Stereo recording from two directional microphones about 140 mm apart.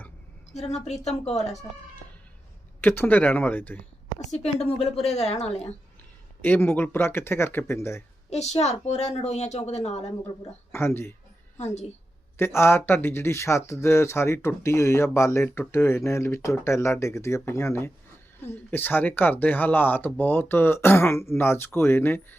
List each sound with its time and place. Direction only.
0.5 s speech: 50° left (ahead or behind)
2.8 s speech: 15° left (ahead or behind)
4.3 s speech: 50° left (ahead or behind)
6.4 s speech: 15° left (ahead or behind)
8.3 s speech: 50° left (ahead or behind)
10.7 s speech: 15° left (ahead or behind)
11.5 s speech: 50° left (ahead or behind)
12.5 s speech: 15° left (ahead or behind)